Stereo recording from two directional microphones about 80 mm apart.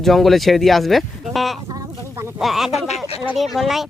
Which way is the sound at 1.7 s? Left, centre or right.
Right.